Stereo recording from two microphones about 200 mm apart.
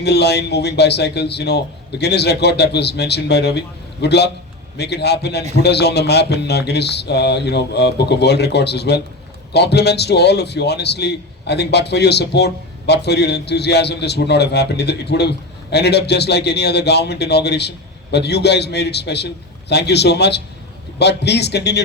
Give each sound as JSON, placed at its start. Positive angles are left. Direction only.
{"t": 0.0, "sound": "a man's voice", "side_deg": 55}